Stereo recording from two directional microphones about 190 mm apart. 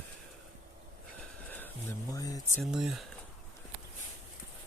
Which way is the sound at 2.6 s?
Centre (ahead or behind).